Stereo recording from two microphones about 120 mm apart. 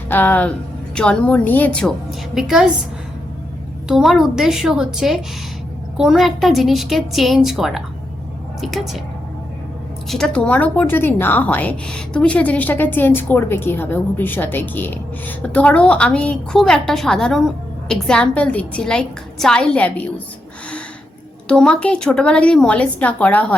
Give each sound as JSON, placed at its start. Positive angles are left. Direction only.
{"t": 0.1, "sound": "speech", "side_deg": 15}
{"t": 3.8, "sound": "a woman's voice", "side_deg": 0}
{"t": 10.1, "sound": "speech", "side_deg": 5}
{"t": 21.4, "sound": "speech", "side_deg": 10}